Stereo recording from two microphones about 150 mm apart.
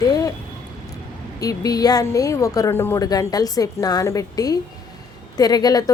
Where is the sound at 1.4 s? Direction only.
25° left (ahead or behind).